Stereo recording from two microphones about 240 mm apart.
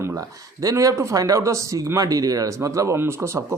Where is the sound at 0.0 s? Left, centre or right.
Centre.